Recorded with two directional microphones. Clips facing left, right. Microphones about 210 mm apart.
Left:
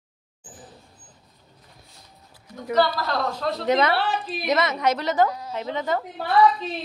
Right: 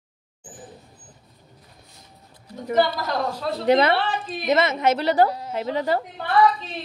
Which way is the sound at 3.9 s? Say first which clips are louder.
Right 1 dB; 10° left (ahead or behind).